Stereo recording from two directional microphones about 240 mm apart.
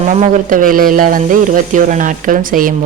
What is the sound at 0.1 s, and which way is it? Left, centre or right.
Speech, right.